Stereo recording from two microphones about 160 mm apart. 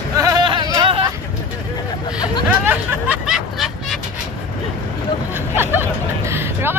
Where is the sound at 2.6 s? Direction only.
10° right (ahead or behind).